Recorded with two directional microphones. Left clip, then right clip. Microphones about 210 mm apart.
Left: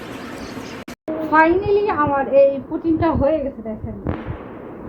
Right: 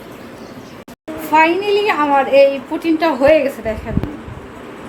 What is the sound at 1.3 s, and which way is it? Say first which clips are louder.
A woman's voice: right 2 dB; 15° right (ahead or behind).